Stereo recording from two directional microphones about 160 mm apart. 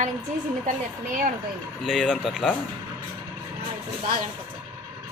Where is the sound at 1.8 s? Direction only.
Centre (ahead or behind).